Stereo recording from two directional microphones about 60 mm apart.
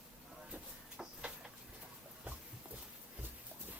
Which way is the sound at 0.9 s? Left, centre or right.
Centre.